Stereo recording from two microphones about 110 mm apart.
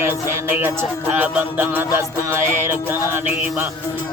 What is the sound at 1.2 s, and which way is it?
Music, 20° right (ahead or behind).